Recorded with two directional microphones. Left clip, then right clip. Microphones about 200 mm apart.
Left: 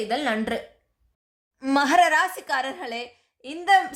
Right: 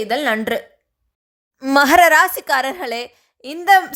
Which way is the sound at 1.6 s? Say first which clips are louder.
Right 8 dB; 35° right (ahead or behind).